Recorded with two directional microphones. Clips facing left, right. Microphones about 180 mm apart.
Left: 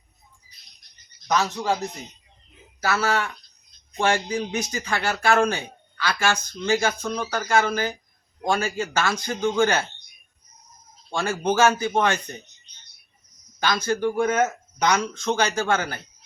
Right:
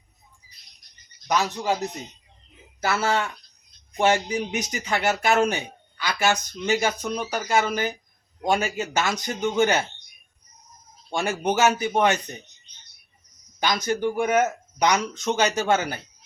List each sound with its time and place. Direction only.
1.3 s speech: 15° right (ahead or behind)
2.8 s speech: 25° right (ahead or behind)
11.1 s speech: 20° right (ahead or behind)
13.8 s speech: 15° right (ahead or behind)